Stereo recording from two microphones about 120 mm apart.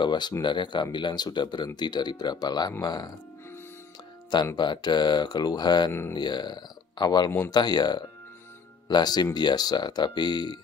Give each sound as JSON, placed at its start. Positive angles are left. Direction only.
{"t": 0.0, "sound": "speech", "side_deg": 40}
{"t": 4.6, "sound": "speech", "side_deg": 40}
{"t": 5.9, "sound": "speech", "side_deg": 20}
{"t": 6.1, "sound": "speech", "side_deg": 35}